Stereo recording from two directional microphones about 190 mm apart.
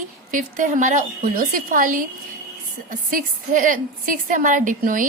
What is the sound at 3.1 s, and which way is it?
A woman's voice, 45° right (ahead or behind).